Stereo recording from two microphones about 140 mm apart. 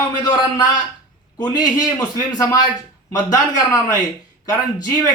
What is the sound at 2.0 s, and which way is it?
A man's voice, 25° left (ahead or behind).